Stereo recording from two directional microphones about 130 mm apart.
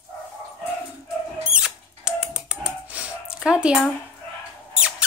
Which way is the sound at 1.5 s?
5° right (ahead or behind).